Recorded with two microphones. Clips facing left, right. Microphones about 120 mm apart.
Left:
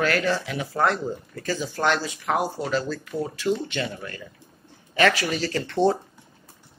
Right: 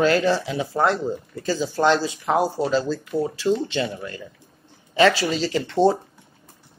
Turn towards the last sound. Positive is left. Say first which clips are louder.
# right 3 dB
turn(degrees=-15)  # may be behind; listen again after turning